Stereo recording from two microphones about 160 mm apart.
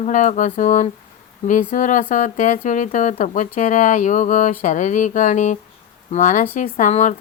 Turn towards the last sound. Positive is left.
turn(degrees=50)  # may be behind; listen again after turning